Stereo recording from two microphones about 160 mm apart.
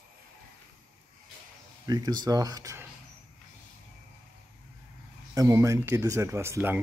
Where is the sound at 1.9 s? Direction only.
25° right (ahead or behind).